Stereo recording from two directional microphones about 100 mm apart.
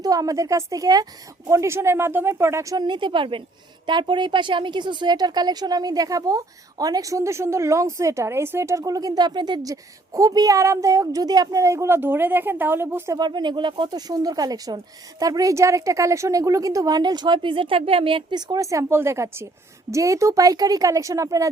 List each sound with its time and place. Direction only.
0.0 s speech: 40° right (ahead or behind)
2.7 s a woman's voice: 50° right (ahead or behind); by 13.1 s 20° right (ahead or behind)
13.1 s speech: 50° right (ahead or behind)